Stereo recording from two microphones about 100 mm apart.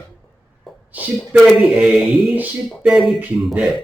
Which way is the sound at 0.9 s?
15° right (ahead or behind).